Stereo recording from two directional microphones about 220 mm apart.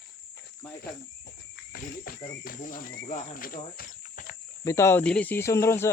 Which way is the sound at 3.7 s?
40° left (ahead or behind).